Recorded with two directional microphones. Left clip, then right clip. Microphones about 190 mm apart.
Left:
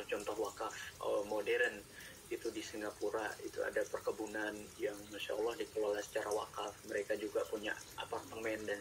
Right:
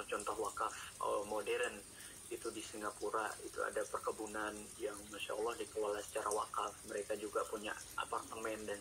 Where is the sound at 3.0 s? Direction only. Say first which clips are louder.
Even; 20° left (ahead or behind).